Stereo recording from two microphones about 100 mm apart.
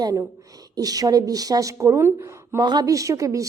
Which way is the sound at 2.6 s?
45° right (ahead or behind).